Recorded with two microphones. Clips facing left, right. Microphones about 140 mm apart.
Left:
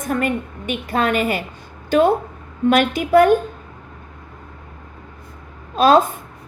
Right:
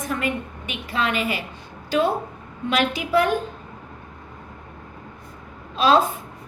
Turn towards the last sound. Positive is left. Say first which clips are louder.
# left 5 dB
turn(degrees=50)  # may be behind; listen again after turning